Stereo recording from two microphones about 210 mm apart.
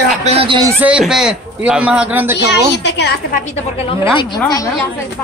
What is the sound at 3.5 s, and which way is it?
Speech, 25° left (ahead or behind).